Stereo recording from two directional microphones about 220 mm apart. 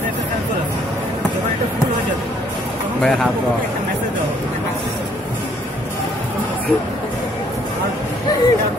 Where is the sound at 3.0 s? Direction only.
Centre (ahead or behind).